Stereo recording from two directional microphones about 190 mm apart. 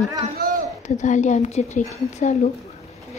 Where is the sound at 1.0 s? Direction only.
40° left (ahead or behind).